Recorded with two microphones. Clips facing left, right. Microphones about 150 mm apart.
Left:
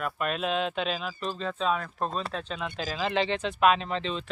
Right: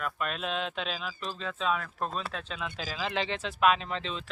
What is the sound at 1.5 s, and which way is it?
Speech, 35° left (ahead or behind).